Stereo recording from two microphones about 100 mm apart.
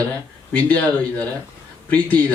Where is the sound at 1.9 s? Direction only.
15° left (ahead or behind).